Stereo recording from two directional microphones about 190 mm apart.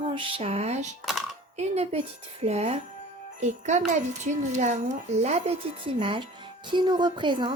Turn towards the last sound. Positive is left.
turn(degrees=-25)  # may be behind; listen again after turning